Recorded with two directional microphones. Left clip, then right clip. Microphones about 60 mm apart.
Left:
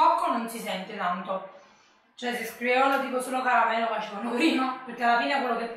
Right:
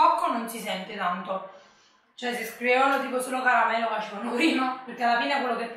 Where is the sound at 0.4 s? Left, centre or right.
Centre.